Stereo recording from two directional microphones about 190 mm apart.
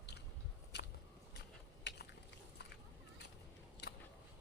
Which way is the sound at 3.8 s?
60° left (ahead or behind).